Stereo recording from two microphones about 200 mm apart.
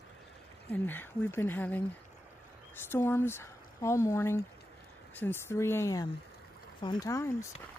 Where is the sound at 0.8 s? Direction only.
10° left (ahead or behind).